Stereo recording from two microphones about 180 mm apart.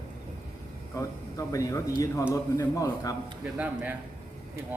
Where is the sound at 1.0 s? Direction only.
20° left (ahead or behind).